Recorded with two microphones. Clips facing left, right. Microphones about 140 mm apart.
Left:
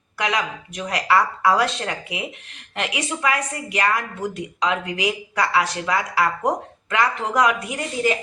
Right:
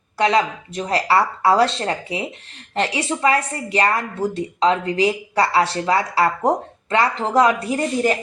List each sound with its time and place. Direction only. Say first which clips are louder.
0.2 s a woman's voice: right 6 dB; 30° right (ahead or behind)